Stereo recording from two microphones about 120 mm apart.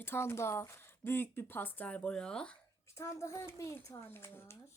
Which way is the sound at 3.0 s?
25° left (ahead or behind).